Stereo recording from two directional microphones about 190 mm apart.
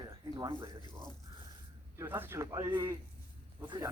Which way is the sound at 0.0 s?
20° right (ahead or behind).